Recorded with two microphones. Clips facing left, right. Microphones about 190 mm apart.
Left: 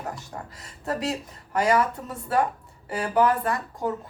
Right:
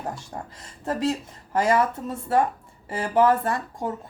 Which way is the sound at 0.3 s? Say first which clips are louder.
Right 2 dB; 25° right (ahead or behind).